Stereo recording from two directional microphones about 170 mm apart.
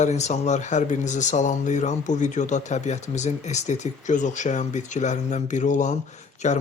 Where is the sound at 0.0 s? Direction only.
40° left (ahead or behind).